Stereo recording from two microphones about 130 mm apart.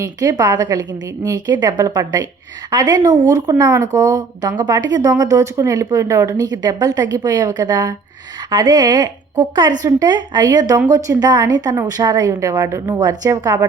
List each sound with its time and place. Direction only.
0.0 s a woman's voice: 30° right (ahead or behind)